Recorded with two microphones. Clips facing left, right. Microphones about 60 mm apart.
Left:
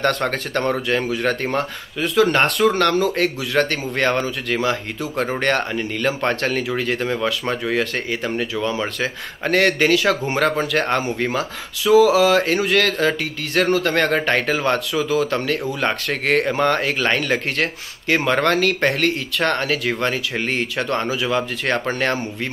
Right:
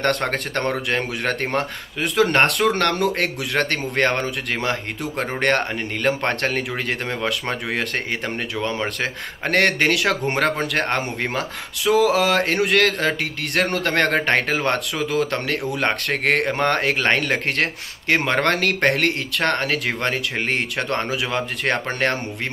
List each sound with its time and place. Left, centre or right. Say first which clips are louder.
0.0 s speech: left 1 dB; right
12.1 s speech: left 3 dB; right